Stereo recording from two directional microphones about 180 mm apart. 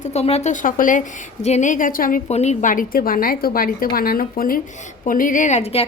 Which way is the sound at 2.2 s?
40° left (ahead or behind).